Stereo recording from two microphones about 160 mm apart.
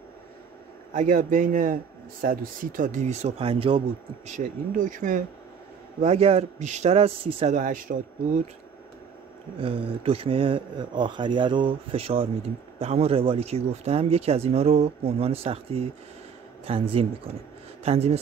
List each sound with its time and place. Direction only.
0.9 s speech: 55° right (ahead or behind); by 3.8 s 35° right (ahead or behind)
4.3 s speech: 55° right (ahead or behind)
5.9 s speech: 40° right (ahead or behind)
7.5 s speech: 55° right (ahead or behind)
9.6 s speech: 35° right (ahead or behind)